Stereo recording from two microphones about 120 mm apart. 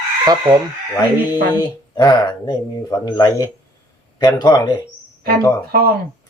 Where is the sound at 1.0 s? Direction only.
35° left (ahead or behind).